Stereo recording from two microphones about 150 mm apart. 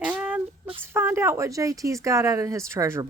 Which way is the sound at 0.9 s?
15° right (ahead or behind).